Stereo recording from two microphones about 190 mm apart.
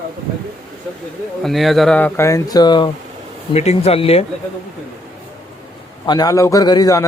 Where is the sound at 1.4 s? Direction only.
Centre (ahead or behind); by 2.9 s 25° left (ahead or behind).